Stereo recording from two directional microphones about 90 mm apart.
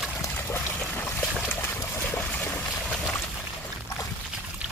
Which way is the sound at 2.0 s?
15° left (ahead or behind).